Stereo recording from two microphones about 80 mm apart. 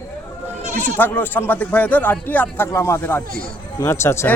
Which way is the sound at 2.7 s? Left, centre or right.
Left.